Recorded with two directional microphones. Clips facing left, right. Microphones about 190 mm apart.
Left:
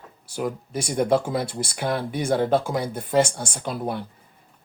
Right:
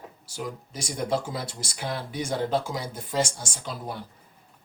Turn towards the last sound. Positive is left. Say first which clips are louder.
# left 7 dB
turn(degrees=60)  # may be behind; listen again after turning